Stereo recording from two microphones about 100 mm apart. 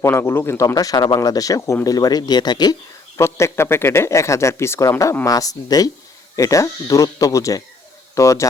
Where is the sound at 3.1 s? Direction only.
25° left (ahead or behind).